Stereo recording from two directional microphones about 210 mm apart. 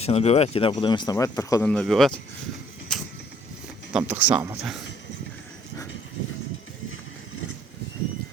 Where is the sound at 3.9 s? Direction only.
5° right (ahead or behind).